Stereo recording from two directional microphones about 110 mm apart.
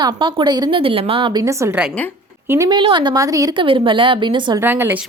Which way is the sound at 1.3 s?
30° right (ahead or behind).